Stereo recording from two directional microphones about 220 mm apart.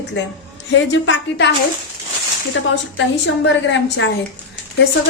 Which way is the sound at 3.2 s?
55° left (ahead or behind).